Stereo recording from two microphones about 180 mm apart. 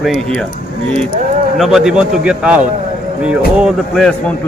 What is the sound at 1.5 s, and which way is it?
Speech, centre (ahead or behind).